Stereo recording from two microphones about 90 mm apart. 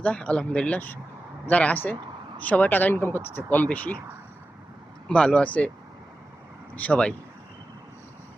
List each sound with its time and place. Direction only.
0.0 s speech: 10° left (ahead or behind)
5.0 s speech: 10° left (ahead or behind)
6.7 s speech: 15° left (ahead or behind)